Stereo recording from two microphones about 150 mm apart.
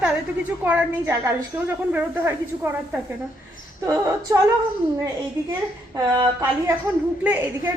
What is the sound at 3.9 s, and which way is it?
Speech, 20° right (ahead or behind).